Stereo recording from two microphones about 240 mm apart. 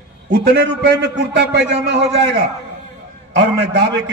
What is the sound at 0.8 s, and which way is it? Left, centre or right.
A man's voice, right.